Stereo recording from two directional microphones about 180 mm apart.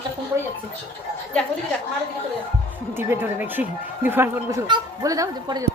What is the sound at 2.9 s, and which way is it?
Speech, 10° right (ahead or behind).